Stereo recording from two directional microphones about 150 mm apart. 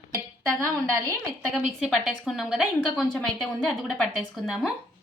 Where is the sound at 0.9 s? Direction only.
25° right (ahead or behind).